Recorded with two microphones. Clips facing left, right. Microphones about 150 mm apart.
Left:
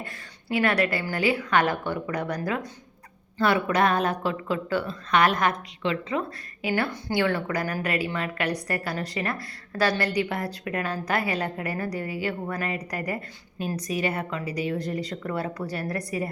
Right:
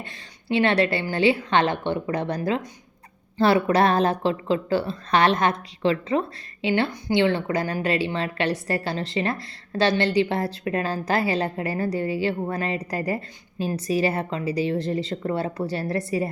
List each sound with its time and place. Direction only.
0.0 s a woman's voice: 25° right (ahead or behind)